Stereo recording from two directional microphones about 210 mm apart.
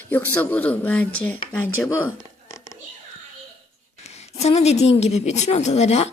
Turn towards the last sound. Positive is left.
turn(degrees=30)  # may be behind; listen again after turning